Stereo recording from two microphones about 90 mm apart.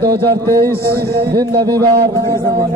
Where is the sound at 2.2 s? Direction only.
40° right (ahead or behind).